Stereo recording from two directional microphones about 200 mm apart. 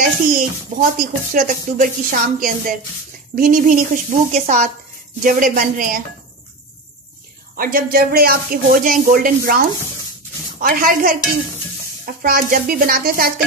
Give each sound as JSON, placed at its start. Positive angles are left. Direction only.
{"t": 0.3, "sound": "speech", "side_deg": -45}
{"t": 7.5, "sound": "speech", "side_deg": -45}
{"t": 10.6, "sound": "speech", "side_deg": -45}
{"t": 12.2, "sound": "speech", "side_deg": -45}